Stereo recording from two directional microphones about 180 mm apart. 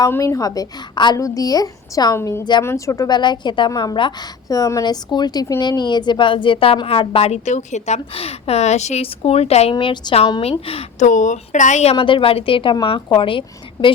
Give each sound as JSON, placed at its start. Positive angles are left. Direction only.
{"t": 0.0, "sound": "a woman's voice", "side_deg": 15}